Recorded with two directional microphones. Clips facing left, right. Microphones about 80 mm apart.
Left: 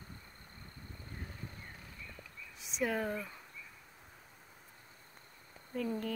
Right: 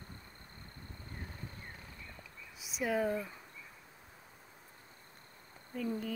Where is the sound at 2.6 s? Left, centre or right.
Centre.